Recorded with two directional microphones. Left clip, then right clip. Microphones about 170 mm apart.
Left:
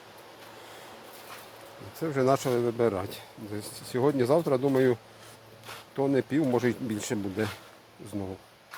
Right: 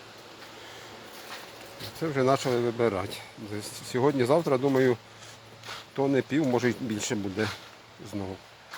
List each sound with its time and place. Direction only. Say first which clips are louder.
2.0 s speech: even; 5° left (ahead or behind)
6.0 s speech: even; 5° left (ahead or behind)